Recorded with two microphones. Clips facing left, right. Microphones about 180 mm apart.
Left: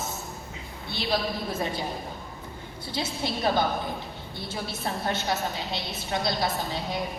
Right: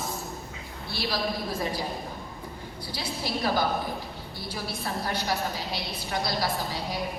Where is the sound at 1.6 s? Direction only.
25° left (ahead or behind).